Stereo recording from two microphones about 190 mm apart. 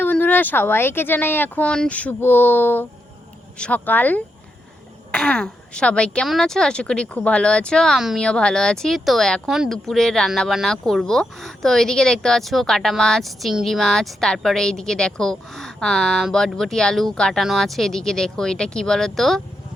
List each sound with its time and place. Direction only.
0.0 s speech: 10° left (ahead or behind)